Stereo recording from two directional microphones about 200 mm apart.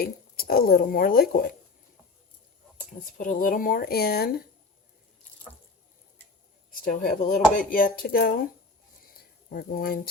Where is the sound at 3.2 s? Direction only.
40° left (ahead or behind).